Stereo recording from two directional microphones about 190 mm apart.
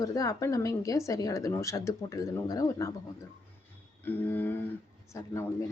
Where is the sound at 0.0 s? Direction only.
15° left (ahead or behind).